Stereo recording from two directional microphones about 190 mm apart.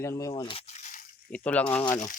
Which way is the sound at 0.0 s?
15° left (ahead or behind).